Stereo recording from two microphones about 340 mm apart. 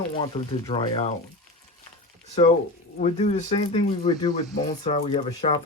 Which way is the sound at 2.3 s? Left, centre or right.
Centre.